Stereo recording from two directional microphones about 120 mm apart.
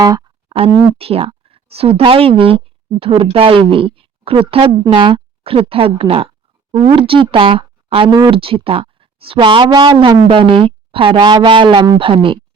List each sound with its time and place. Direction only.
0.0 s speech: 30° right (ahead or behind)
0.4 s a sound: 55° right (ahead or behind)
0.7 s speech: 25° right (ahead or behind)
0.9 s a woman's voice: 55° right (ahead or behind)